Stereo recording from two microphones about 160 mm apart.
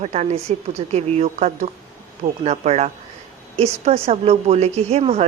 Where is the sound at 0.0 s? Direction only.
45° right (ahead or behind).